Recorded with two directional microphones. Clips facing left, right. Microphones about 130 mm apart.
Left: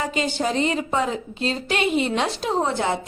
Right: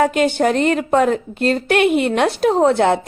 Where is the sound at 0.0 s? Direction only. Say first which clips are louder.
Right 9 dB; 60° right (ahead or behind).